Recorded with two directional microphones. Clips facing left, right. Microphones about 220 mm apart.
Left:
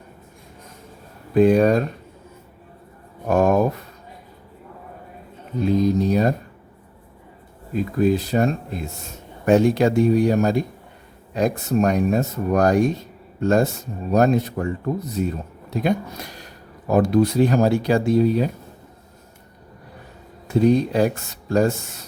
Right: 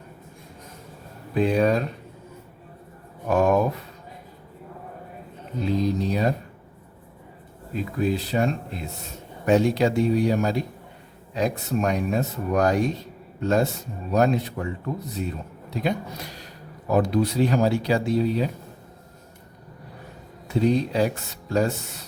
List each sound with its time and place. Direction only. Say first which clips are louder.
1.3 s speech: left 6 dB; 45° left (ahead or behind)
3.2 s speech: left 2 dB; 45° left (ahead or behind)
5.6 s speech: left 5 dB; 45° left (ahead or behind)
7.9 s speech: left 5 dB; 45° left (ahead or behind)
20.5 s speech: left 4 dB; 50° left (ahead or behind)